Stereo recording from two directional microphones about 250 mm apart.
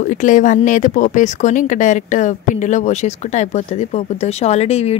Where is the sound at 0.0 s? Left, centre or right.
Left.